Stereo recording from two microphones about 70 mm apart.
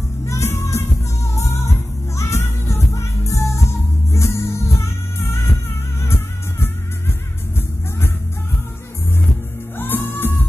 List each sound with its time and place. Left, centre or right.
0.3 s music: left
9.8 s music: left